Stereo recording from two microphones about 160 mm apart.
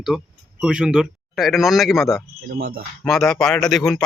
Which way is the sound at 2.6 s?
65° right (ahead or behind).